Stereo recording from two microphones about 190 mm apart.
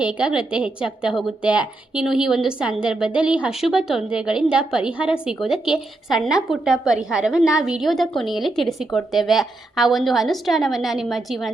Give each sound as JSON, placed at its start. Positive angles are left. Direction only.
{"t": 0.0, "sound": "a woman's voice", "side_deg": -5}